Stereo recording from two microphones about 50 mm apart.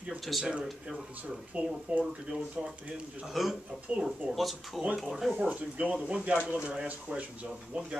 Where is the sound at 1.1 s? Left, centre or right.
Right.